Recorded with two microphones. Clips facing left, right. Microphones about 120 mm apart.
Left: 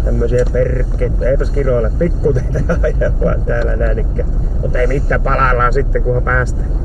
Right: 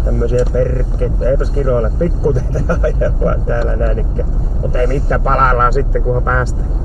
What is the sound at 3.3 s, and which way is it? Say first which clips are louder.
Speech: even; 5° right (ahead or behind).